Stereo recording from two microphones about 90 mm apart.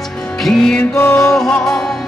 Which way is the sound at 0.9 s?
25° left (ahead or behind).